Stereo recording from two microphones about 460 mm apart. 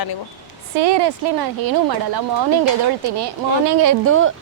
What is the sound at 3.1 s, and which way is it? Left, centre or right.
Speech, right.